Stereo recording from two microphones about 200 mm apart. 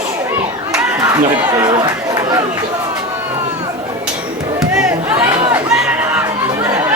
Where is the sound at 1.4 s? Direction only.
20° right (ahead or behind).